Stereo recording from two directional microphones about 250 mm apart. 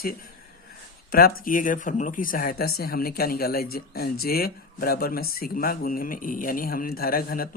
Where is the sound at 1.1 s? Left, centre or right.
Left.